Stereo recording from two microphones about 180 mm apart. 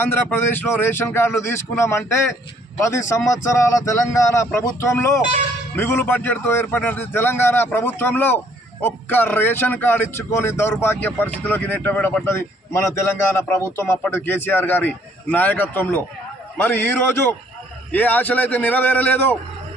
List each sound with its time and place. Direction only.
0.0 s a man's voice: 10° left (ahead or behind)
3.6 s a man's voice: 15° left (ahead or behind)